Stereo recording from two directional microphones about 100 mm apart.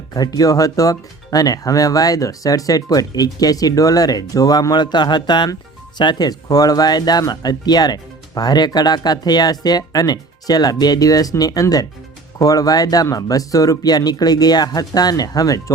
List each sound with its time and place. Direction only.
0.1 s speech: 40° left (ahead or behind)